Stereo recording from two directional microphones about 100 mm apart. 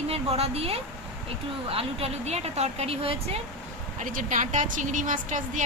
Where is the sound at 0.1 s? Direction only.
90° right.